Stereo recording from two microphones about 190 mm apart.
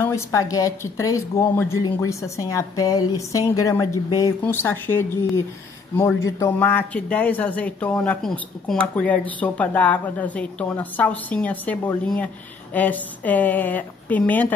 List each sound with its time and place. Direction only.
0.0 s a woman's voice: 15° left (ahead or behind)
6.2 s a woman's voice: 10° left (ahead or behind)